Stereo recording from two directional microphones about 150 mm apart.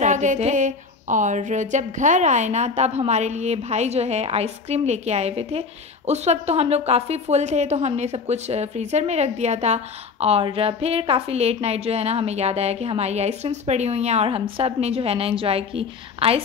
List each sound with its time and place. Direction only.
0.0 s a woman's voice: 55° right (ahead or behind)